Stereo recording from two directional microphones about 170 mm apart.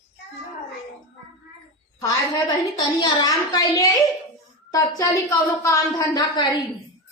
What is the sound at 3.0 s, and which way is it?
A woman's voice, 25° left (ahead or behind).